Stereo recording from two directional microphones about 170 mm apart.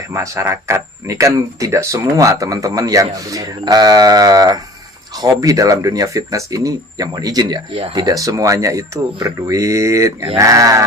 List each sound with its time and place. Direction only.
0.1 s speech: 15° right (ahead or behind)